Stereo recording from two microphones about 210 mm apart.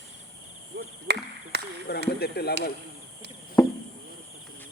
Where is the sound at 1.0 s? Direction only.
50° right (ahead or behind).